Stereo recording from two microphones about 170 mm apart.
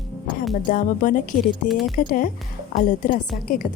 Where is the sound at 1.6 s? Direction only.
Centre (ahead or behind).